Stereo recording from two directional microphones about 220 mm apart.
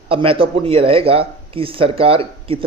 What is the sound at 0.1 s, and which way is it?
Speech, 25° right (ahead or behind).